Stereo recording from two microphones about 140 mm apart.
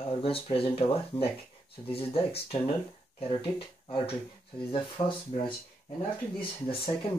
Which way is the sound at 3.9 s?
40° left (ahead or behind).